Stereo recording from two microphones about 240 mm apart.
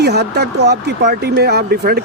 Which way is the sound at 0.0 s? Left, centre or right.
Right.